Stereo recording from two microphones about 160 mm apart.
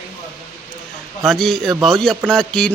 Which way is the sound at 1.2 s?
Centre (ahead or behind).